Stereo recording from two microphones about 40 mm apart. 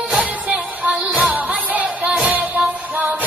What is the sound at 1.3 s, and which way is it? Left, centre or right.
Music, right.